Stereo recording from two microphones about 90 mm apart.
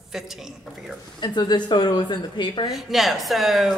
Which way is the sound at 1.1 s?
60° left (ahead or behind).